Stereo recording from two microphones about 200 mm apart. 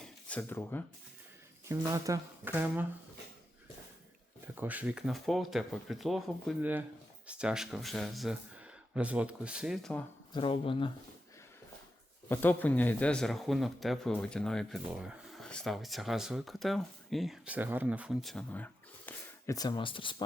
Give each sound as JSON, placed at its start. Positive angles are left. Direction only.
{"t": 0.0, "sound": "a sound", "side_deg": 5}
{"t": 1.6, "sound": "speech", "side_deg": -15}
{"t": 4.5, "sound": "speech", "side_deg": -10}
{"t": 10.3, "sound": "speech", "side_deg": 25}
{"t": 12.3, "sound": "speech", "side_deg": 10}